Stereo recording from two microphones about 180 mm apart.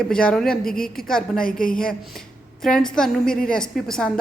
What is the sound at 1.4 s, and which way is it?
Speech, 50° left (ahead or behind).